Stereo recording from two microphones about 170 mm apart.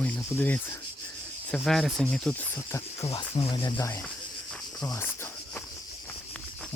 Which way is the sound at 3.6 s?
20° left (ahead or behind).